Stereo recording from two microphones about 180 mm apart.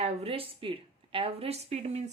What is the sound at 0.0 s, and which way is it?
A woman's voice, 35° right (ahead or behind).